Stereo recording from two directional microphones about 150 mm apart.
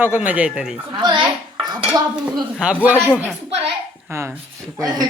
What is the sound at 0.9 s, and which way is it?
Speech, 30° right (ahead or behind).